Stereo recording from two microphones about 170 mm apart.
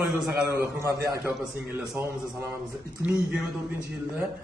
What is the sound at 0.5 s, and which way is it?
Speech, 15° right (ahead or behind).